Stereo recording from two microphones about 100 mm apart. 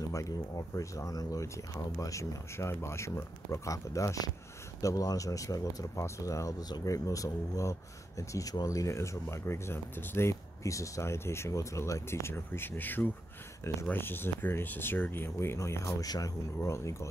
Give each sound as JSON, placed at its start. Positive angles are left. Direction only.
{"t": 0.7, "sound": "speech", "side_deg": 35}